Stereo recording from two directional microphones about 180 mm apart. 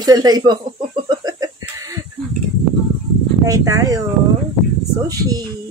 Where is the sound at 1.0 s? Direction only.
20° right (ahead or behind).